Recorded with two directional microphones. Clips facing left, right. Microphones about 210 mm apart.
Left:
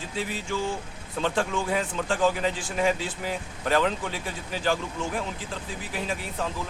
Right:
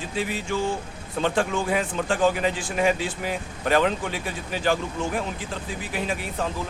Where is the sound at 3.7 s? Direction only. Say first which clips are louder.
Right 3 dB; 65° right (ahead or behind).